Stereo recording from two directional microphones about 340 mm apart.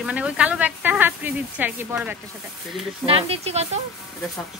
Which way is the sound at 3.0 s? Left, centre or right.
Centre.